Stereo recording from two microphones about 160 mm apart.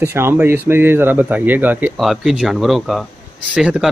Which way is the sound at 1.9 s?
Centre (ahead or behind).